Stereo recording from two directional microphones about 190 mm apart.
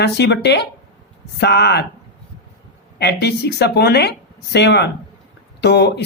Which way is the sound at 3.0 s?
60° left (ahead or behind).